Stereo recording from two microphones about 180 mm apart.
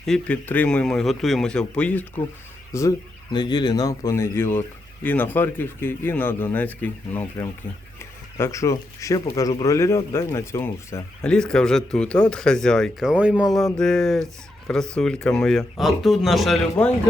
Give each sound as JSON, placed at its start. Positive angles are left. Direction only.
{"t": 0.0, "sound": "speech", "side_deg": 5}
{"t": 11.2, "sound": "speech", "side_deg": 5}